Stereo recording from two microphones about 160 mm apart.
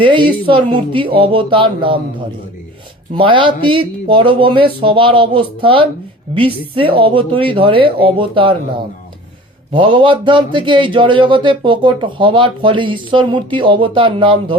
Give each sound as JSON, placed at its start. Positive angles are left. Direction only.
{"t": 0.0, "sound": "speech", "side_deg": -30}
{"t": 3.2, "sound": "speech", "side_deg": -30}
{"t": 9.7, "sound": "speech", "side_deg": -30}